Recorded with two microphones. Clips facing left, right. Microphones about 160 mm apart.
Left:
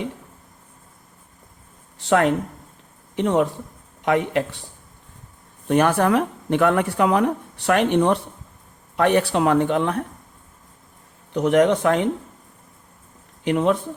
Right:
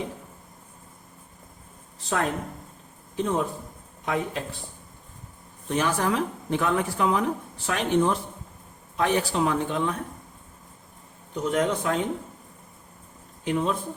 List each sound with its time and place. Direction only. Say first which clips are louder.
2.0 s a man's voice: left 9 dB; 75° left (ahead or behind)
5.6 s speech: left 7 dB; 60° left (ahead or behind)
11.3 s a man's voice: left 8 dB; 75° left (ahead or behind)
13.4 s speech: left 6 dB; 70° left (ahead or behind)